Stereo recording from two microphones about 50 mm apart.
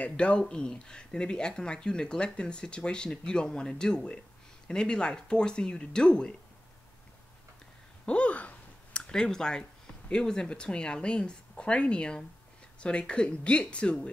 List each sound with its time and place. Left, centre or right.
0.0 s speech: left
8.0 s clicking: left
9.0 s a woman's voice: centre